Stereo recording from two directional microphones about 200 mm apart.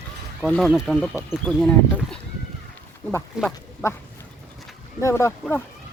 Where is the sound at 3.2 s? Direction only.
10° left (ahead or behind).